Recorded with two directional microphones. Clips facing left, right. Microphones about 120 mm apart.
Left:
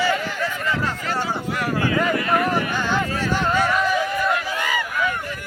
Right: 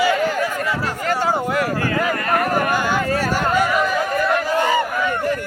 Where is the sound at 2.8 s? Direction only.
10° right (ahead or behind).